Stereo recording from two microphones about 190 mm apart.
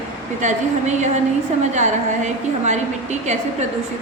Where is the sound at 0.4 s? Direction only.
40° right (ahead or behind).